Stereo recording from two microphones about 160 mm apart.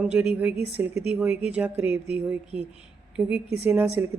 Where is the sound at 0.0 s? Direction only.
5° right (ahead or behind).